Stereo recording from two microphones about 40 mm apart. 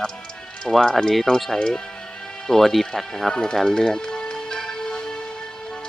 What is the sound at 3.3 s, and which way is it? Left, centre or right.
Speech, left.